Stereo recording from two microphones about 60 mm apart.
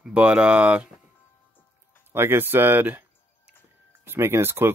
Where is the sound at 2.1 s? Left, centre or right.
Right.